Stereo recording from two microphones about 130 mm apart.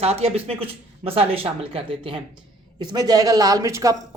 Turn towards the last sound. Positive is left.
turn(degrees=-25)  # may be behind; listen again after turning